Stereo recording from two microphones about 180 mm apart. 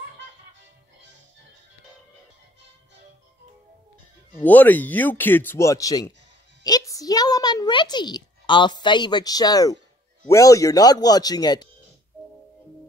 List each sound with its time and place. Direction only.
4.4 s a woman's voice: 10° left (ahead or behind)